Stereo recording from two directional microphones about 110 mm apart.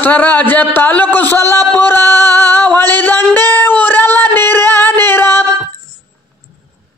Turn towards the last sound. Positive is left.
turn(degrees=20)  # may be behind; listen again after turning